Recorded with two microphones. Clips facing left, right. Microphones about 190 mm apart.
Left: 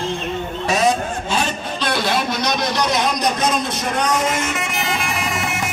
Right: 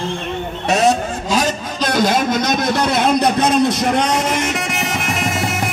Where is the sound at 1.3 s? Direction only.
40° right (ahead or behind).